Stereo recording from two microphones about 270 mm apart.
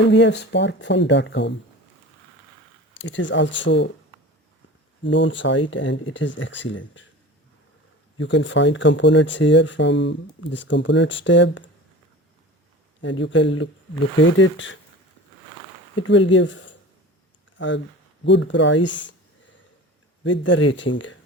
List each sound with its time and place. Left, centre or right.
0.0 s speech: left
3.0 s speech: left
5.0 s speech: left
8.2 s speech: left
13.0 s speech: left
16.0 s speech: left
20.2 s speech: left